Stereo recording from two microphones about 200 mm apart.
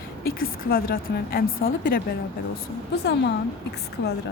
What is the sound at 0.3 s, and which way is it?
A woman's voice, 50° left (ahead or behind).